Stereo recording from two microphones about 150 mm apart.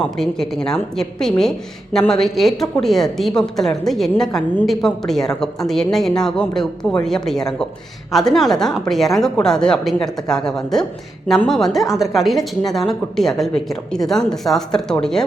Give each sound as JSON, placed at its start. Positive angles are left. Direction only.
{"t": 0.2, "sound": "a woman's voice", "side_deg": 0}